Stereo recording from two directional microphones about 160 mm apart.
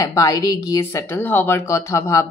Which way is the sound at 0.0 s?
20° left (ahead or behind).